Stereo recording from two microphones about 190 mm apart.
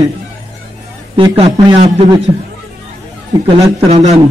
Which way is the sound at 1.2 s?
30° right (ahead or behind).